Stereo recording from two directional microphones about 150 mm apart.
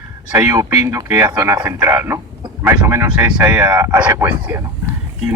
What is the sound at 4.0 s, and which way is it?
Speech, 10° right (ahead or behind).